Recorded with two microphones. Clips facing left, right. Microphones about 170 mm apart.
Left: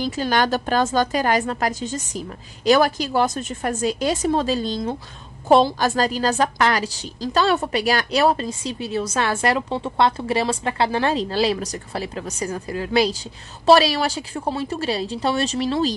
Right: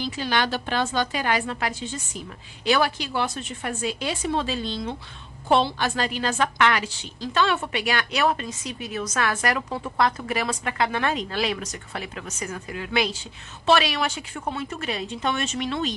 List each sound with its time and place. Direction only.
0.0 s a woman's voice: 45° left (ahead or behind)